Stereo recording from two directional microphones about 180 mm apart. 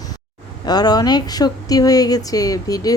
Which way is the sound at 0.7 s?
20° left (ahead or behind).